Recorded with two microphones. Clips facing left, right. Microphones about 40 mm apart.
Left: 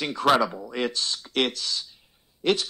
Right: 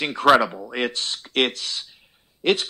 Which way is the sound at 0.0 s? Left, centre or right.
Right.